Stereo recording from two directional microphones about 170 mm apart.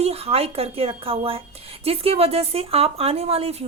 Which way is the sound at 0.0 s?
35° right (ahead or behind).